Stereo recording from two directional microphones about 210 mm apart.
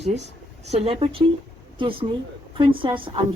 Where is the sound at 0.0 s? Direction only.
30° right (ahead or behind).